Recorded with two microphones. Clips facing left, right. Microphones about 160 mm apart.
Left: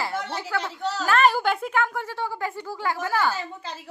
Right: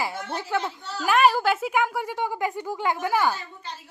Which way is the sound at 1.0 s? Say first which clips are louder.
Right 1 dB; 10° right (ahead or behind).